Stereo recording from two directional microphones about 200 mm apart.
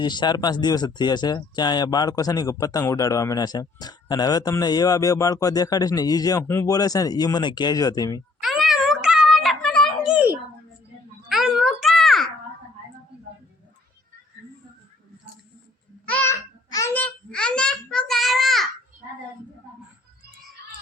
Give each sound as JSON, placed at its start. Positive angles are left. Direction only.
{"t": 0.0, "sound": "speech", "side_deg": 20}
{"t": 8.4, "sound": "a sound", "side_deg": 0}
{"t": 16.0, "sound": "babbling", "side_deg": 10}